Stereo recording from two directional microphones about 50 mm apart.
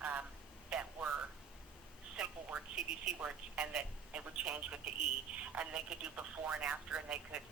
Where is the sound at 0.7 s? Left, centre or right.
Centre.